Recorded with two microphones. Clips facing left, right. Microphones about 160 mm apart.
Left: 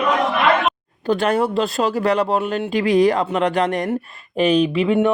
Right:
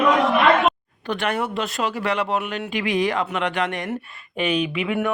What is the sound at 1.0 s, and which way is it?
A man's voice, 35° left (ahead or behind).